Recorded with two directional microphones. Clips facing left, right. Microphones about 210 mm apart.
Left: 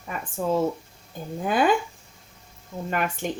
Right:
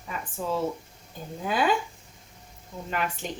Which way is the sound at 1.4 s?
50° left (ahead or behind).